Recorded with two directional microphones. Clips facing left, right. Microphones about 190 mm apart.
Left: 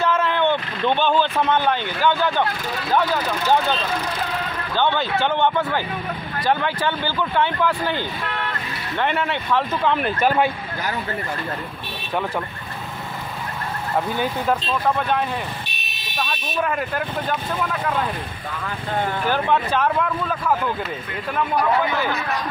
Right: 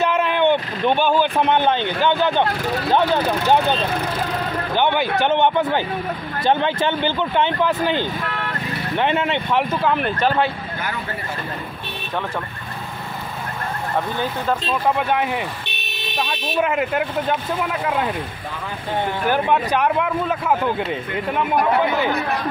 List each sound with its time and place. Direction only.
0.0 s speech: 15° right (ahead or behind)
4.7 s speech: 15° right (ahead or behind)
9.8 s speech: centre (ahead or behind)
13.9 s speech: 5° left (ahead or behind)
14.7 s speech: 15° right (ahead or behind)
15.7 s a sound: 60° right (ahead or behind)
16.2 s speech: 20° right (ahead or behind)
19.2 s speech: 15° right (ahead or behind)